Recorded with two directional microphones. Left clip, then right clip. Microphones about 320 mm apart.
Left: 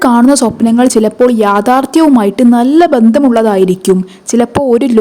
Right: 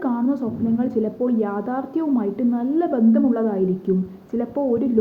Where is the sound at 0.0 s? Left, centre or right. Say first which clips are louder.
Left 16 dB; left.